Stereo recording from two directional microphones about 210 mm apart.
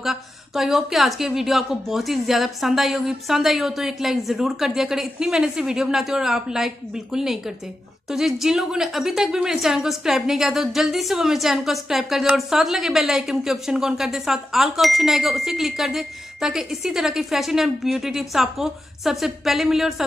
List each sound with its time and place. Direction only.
0.0 s a woman's voice: centre (ahead or behind)